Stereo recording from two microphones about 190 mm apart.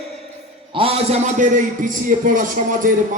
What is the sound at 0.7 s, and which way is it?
A man's voice, 30° right (ahead or behind).